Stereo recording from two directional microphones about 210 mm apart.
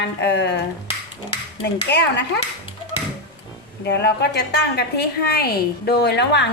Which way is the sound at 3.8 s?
55° left (ahead or behind).